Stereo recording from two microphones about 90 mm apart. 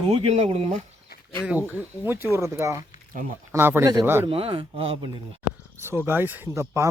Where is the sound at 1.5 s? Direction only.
20° right (ahead or behind).